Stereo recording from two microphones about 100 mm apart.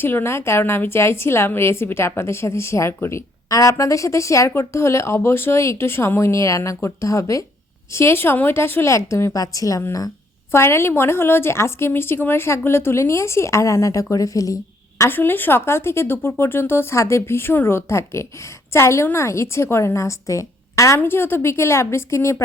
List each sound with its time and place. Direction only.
0.0 s a woman's voice: 20° left (ahead or behind)